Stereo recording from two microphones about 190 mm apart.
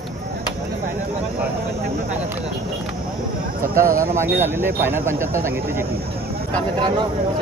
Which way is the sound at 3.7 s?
45° right (ahead or behind).